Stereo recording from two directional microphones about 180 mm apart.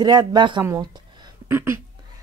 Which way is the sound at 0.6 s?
20° right (ahead or behind).